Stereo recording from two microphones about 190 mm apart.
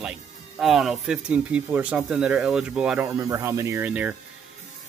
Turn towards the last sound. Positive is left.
turn(degrees=-5)  # may be behind; listen again after turning